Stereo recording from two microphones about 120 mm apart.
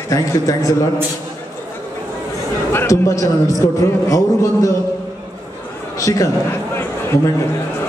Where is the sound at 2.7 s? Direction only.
25° left (ahead or behind).